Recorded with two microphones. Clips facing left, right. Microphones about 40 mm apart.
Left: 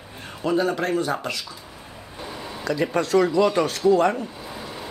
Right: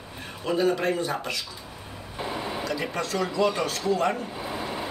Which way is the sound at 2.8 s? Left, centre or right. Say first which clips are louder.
Left 12 dB; left.